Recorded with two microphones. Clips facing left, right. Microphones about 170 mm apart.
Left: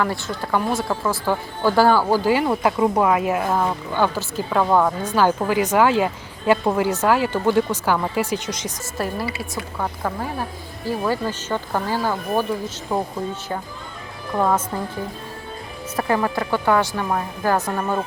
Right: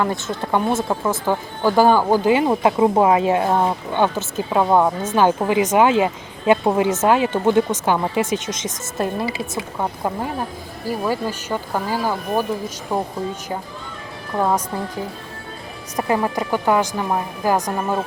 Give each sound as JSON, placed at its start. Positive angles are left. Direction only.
{"t": 0.0, "sound": "speech", "side_deg": -20}
{"t": 16.0, "sound": "speech", "side_deg": -15}